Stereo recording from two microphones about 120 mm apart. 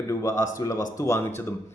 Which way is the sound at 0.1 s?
25° left (ahead or behind).